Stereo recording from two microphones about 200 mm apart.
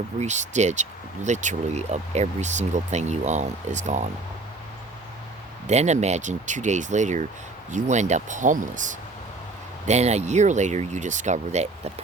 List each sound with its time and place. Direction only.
0.2 s speech: 35° right (ahead or behind)
5.6 s speech: 35° right (ahead or behind)